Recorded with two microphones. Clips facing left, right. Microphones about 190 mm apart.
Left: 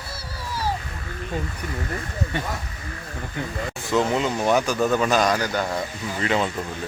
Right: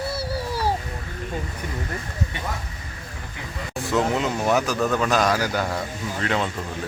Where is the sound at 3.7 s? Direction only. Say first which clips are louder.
Even; centre (ahead or behind).